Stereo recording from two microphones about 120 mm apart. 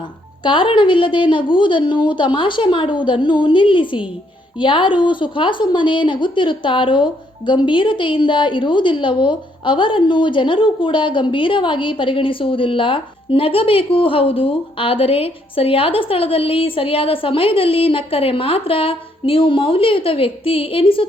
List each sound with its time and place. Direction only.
0.4 s a woman's voice: 45° left (ahead or behind)